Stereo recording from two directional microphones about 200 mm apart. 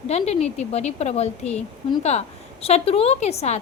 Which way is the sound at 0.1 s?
30° left (ahead or behind).